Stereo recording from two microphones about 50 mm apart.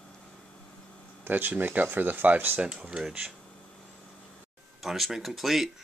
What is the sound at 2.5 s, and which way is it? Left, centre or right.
Speech, centre.